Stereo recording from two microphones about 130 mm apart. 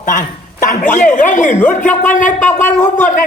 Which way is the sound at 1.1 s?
75° left (ahead or behind).